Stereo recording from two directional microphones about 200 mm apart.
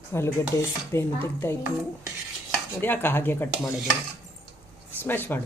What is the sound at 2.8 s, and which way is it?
Speech, 10° left (ahead or behind).